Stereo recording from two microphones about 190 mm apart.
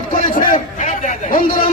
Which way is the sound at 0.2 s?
45° left (ahead or behind).